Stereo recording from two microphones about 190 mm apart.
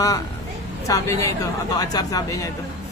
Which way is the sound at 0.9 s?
15° left (ahead or behind).